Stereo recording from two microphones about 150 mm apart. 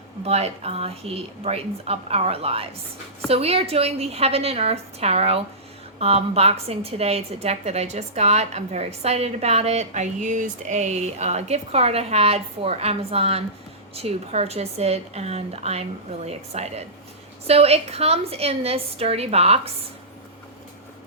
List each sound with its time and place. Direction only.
0.3 s a woman's voice: 45° right (ahead or behind)